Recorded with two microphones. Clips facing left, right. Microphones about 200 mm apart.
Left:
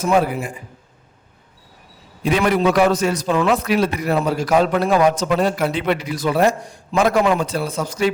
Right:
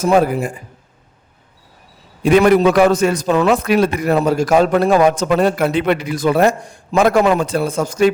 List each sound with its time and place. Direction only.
0.0 s a man's voice: 45° right (ahead or behind)
2.2 s a man's voice: 50° right (ahead or behind)